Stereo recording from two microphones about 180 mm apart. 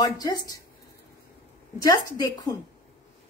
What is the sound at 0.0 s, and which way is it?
Speech, 20° left (ahead or behind).